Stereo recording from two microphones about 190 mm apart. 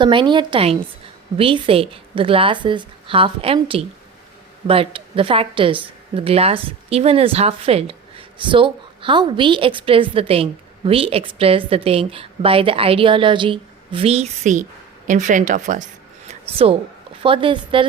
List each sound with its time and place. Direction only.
0.0 s a woman's voice: 25° right (ahead or behind); by 15.8 s 40° right (ahead or behind)
16.3 s a sound: 30° right (ahead or behind)
17.2 s a woman's voice: 25° right (ahead or behind)